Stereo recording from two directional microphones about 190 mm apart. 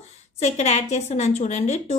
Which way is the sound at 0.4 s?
35° left (ahead or behind).